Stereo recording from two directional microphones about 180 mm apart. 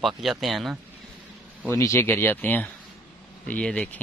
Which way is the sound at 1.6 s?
15° left (ahead or behind).